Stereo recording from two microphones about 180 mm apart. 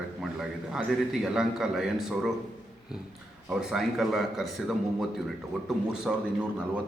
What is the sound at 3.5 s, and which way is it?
A man's voice, 5° right (ahead or behind).